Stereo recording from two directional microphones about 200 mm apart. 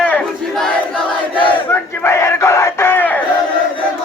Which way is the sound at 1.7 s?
10° left (ahead or behind).